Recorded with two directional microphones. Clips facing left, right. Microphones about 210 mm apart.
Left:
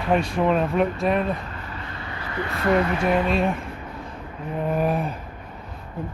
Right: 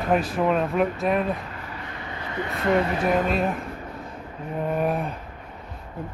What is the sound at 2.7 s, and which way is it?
Speech, 40° right (ahead or behind).